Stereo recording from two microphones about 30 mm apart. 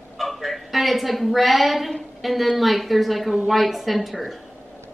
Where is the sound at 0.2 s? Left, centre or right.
Centre.